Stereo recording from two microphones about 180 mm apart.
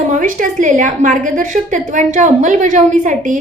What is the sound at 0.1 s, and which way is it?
A woman's voice, 45° right (ahead or behind).